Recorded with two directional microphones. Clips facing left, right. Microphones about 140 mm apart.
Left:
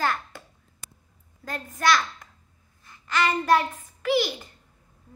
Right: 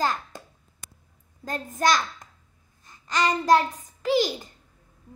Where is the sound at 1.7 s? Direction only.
45° right (ahead or behind).